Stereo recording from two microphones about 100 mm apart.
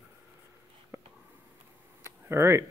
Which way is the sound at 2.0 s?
25° right (ahead or behind).